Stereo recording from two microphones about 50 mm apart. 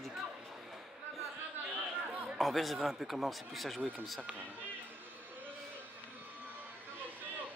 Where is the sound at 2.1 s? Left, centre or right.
Right.